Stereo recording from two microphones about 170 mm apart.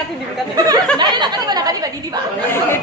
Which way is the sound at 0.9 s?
25° right (ahead or behind).